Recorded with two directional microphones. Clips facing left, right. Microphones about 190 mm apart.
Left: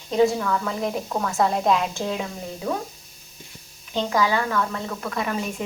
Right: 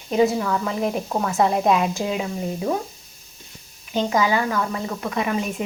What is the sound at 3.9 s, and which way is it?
A woman's voice, 15° right (ahead or behind).